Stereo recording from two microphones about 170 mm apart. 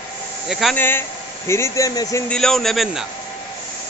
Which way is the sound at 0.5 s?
Centre (ahead or behind).